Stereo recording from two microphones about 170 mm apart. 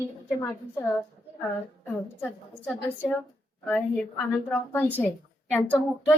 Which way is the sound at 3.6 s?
5° left (ahead or behind).